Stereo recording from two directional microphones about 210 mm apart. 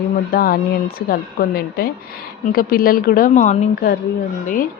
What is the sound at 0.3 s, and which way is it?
A woman's voice, 45° left (ahead or behind).